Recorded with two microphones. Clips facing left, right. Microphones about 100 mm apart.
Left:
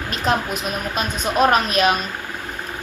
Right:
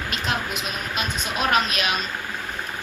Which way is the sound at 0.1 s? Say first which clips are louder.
Left 7 dB; 40° left (ahead or behind).